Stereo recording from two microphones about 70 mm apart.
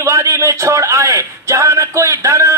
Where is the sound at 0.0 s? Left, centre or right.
Right.